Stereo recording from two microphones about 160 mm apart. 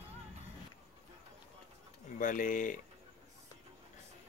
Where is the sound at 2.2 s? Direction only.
55° left (ahead or behind).